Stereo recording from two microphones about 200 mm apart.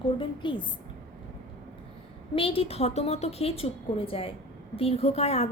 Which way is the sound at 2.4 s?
25° left (ahead or behind).